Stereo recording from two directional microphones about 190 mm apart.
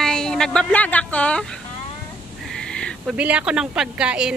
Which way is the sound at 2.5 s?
5° left (ahead or behind).